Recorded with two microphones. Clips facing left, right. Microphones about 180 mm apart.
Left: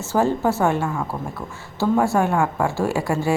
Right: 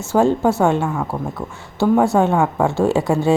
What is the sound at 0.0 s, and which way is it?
A woman's voice, 15° right (ahead or behind).